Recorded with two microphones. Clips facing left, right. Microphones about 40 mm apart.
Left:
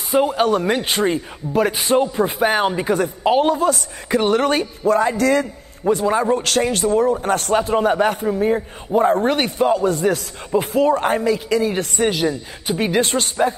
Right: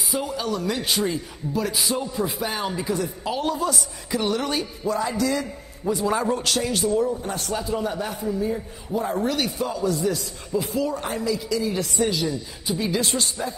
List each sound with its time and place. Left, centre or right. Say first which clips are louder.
0.1 s speech: left 11 dB; left
0.8 s speech: left 5 dB; left
3.4 s speech: left 7 dB; left
6.0 s a man's voice: left 4 dB; left
6.6 s speech: left 5 dB; left